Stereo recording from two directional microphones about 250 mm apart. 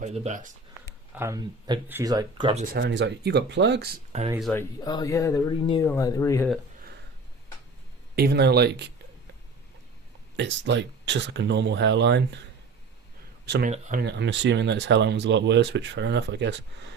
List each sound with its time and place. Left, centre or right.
0.0 s speech: right
1.1 s speech: centre
2.7 s speech: right
4.4 s speech: centre
4.8 s speech: centre
8.1 s speech: right
10.3 s speech: right
13.4 s speech: right
13.7 s speech: right
14.0 s speech: right